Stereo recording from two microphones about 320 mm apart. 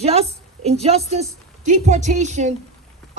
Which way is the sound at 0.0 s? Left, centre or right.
Centre.